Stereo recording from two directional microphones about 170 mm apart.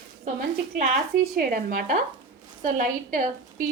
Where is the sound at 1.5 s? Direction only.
50° right (ahead or behind).